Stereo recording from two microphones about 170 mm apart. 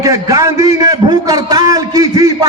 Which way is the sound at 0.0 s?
20° right (ahead or behind).